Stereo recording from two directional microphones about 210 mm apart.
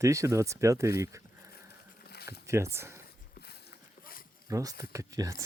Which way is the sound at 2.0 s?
50° left (ahead or behind).